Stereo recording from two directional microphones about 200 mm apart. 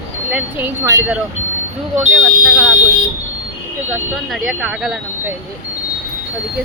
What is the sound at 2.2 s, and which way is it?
Speech, 5° right (ahead or behind).